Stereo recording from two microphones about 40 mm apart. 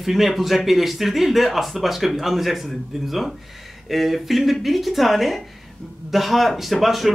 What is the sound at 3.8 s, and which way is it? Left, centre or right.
Speech, centre.